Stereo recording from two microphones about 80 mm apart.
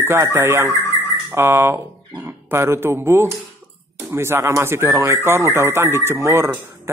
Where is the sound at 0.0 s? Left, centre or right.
Right.